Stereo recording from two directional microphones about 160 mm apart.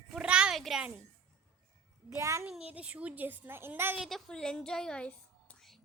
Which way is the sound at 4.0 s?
Centre (ahead or behind).